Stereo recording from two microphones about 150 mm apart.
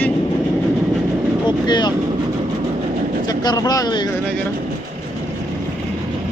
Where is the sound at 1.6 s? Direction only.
30° left (ahead or behind).